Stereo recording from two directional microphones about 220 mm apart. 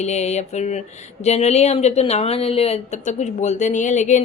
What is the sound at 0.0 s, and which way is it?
A woman's voice, 30° left (ahead or behind).